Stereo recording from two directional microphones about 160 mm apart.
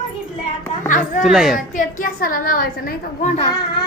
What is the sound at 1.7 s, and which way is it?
A woman's voice, 55° left (ahead or behind).